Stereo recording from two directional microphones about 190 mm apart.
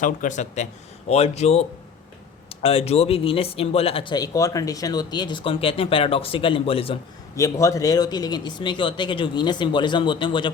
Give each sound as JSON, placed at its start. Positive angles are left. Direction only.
{"t": 0.0, "sound": "speech", "side_deg": 40}
{"t": 7.3, "sound": "speech", "side_deg": 15}